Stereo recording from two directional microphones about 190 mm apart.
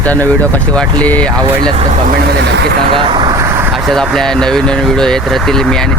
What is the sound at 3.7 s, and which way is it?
Speech, centre (ahead or behind).